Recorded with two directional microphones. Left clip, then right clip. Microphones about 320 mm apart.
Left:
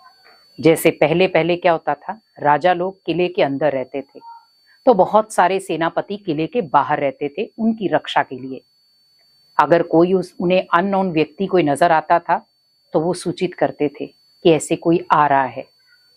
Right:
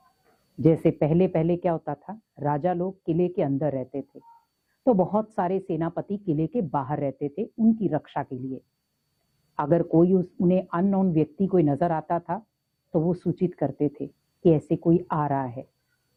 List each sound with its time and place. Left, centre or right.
0.6 s a woman's voice: centre
7.4 s speech: left
7.8 s a woman's voice: centre
9.6 s a woman's voice: centre